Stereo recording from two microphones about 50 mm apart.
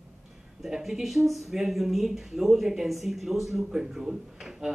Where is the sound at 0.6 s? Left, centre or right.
Centre.